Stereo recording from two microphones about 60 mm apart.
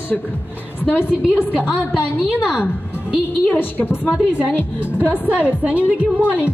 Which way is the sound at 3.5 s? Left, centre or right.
Left.